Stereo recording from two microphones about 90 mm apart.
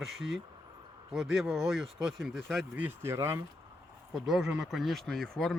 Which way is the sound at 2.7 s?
15° right (ahead or behind).